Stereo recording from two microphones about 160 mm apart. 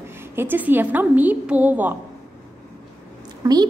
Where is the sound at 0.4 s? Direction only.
10° right (ahead or behind).